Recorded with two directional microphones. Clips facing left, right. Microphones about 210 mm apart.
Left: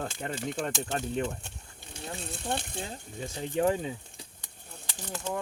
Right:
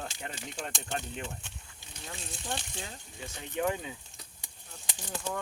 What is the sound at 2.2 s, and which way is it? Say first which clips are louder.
Speech: left 5 dB; 60° left (ahead or behind).